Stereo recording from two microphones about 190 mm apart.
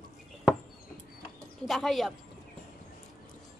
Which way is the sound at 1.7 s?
Centre (ahead or behind).